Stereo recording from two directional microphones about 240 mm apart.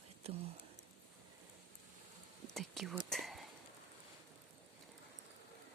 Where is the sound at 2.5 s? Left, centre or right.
Centre.